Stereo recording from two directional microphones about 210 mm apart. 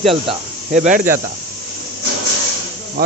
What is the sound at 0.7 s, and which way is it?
Speech, 35° right (ahead or behind).